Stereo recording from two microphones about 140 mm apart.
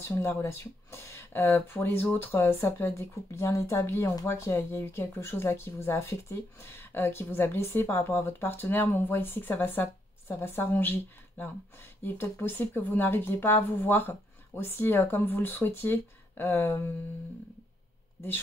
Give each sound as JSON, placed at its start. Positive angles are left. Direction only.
{"t": 0.1, "sound": "speech", "side_deg": 20}